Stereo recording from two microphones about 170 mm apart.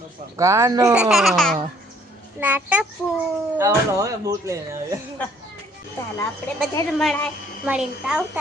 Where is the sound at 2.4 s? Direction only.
10° right (ahead or behind).